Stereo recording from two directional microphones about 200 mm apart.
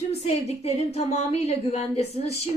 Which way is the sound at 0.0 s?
30° left (ahead or behind).